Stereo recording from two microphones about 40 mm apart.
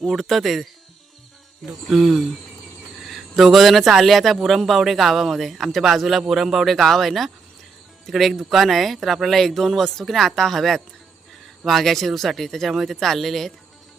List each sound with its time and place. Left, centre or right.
0.0 s a man's voice: centre
1.9 s a man's voice: centre
6.7 s a man's voice: centre
12.7 s a man's voice: centre
13.0 s a man's voice: centre